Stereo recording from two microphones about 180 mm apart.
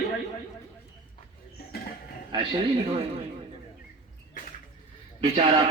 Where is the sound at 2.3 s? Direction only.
30° right (ahead or behind).